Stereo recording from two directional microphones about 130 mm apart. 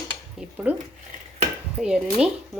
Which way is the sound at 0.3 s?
10° right (ahead or behind).